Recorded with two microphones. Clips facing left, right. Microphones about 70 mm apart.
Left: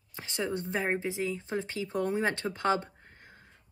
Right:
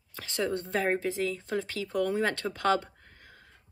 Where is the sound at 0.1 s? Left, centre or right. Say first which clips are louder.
Right 2 dB; left.